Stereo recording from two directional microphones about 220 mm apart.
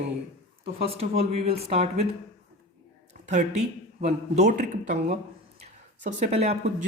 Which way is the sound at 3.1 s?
35° right (ahead or behind).